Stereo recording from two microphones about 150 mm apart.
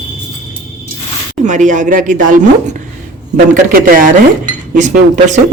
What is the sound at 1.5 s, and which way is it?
Speech, 55° right (ahead or behind).